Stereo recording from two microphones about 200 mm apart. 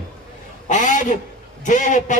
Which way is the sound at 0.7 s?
40° left (ahead or behind).